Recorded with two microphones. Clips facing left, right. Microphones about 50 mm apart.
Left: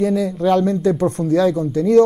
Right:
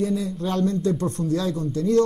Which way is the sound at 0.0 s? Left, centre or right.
Left.